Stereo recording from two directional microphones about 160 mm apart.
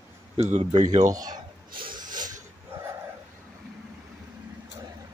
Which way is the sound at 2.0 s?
55° right (ahead or behind).